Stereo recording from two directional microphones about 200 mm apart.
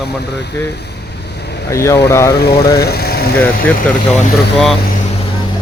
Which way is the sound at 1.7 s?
15° left (ahead or behind).